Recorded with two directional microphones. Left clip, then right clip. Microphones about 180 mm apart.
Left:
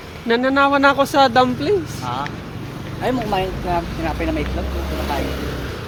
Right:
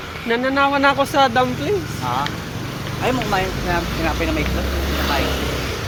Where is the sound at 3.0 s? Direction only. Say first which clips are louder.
Even; 70° left (ahead or behind).